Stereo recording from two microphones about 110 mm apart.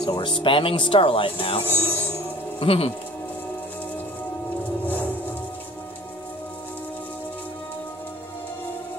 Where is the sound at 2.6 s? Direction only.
60° left (ahead or behind).